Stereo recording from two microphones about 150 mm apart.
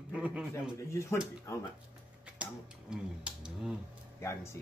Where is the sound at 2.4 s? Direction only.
10° right (ahead or behind).